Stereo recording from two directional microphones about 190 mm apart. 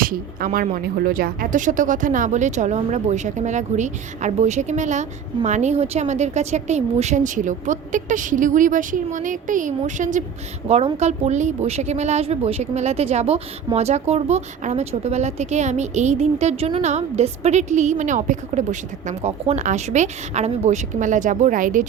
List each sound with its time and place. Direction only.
0.0 s speech: 50° right (ahead or behind)